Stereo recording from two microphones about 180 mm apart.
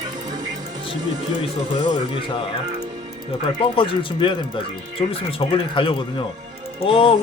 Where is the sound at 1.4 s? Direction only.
35° left (ahead or behind).